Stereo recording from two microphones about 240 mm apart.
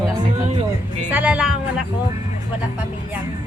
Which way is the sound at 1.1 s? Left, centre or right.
Centre.